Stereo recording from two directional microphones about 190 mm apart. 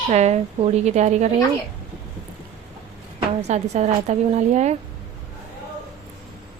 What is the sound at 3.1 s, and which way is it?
A woman's voice, 35° right (ahead or behind).